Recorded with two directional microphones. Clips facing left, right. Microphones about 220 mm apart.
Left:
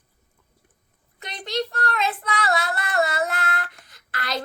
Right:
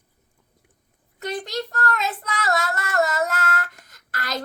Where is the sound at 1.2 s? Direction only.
45° right (ahead or behind).